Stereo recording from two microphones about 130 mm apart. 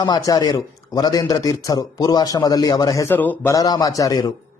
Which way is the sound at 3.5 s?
30° left (ahead or behind).